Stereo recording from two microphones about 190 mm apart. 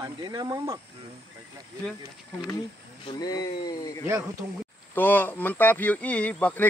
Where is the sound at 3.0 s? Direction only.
20° left (ahead or behind).